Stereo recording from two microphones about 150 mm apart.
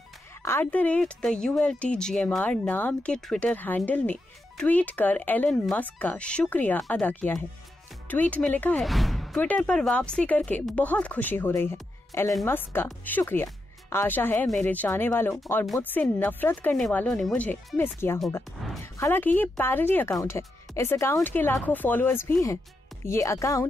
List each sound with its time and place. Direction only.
0.4 s speech: 15° left (ahead or behind)